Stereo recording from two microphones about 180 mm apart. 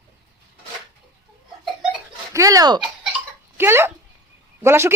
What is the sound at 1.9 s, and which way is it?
Giggle, 15° right (ahead or behind).